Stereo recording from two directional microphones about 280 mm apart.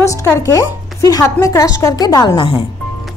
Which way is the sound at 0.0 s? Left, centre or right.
Centre.